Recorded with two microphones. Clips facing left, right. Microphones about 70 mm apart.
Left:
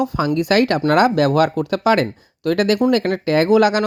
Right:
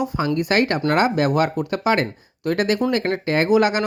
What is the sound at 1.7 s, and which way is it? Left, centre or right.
Speech, left.